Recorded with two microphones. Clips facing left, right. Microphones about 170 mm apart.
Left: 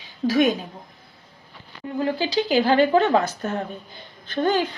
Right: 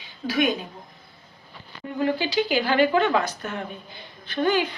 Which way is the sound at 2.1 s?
35° left (ahead or behind).